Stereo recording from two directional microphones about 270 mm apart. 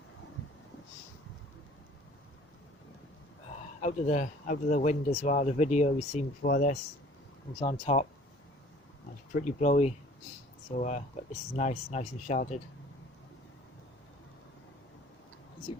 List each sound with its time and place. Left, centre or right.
3.8 s speech: left
9.3 s speech: left